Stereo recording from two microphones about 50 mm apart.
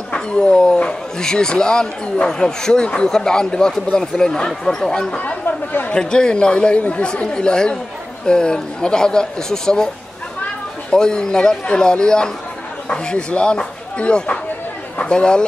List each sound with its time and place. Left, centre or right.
0.1 s speech: centre
5.1 s speech: left
5.9 s speech: centre
10.9 s speech: centre